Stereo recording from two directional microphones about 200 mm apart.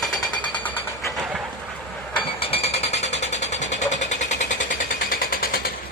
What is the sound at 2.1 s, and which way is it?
Jackhammer, 30° left (ahead or behind).